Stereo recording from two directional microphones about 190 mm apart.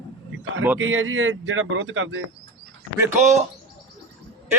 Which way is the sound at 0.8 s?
90° right.